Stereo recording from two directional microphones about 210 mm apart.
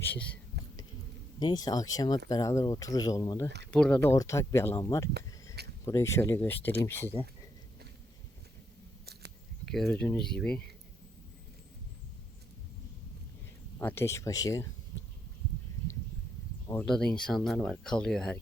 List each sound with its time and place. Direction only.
0.0 s speech: 5° left (ahead or behind)
1.4 s speech: 20° left (ahead or behind)
3.7 s speech: 5° left (ahead or behind)
9.6 s speech: centre (ahead or behind)
13.7 s speech: 10° left (ahead or behind)
16.8 s speech: 5° left (ahead or behind)